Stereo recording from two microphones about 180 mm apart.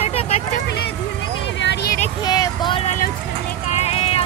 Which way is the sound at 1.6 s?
70° left (ahead or behind).